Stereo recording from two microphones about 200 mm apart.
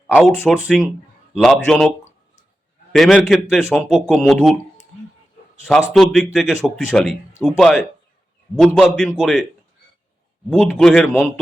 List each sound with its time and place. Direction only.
0.1 s speech: 5° left (ahead or behind)
2.9 s speech: centre (ahead or behind)
5.6 s speech: centre (ahead or behind)
10.7 s speech: centre (ahead or behind)